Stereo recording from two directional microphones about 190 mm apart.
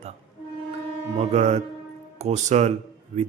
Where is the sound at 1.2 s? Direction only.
35° right (ahead or behind).